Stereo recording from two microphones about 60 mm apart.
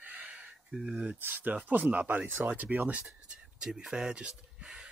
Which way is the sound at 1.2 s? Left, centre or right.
Right.